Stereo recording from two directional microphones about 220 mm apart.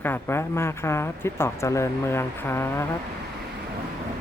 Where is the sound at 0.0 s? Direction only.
10° left (ahead or behind).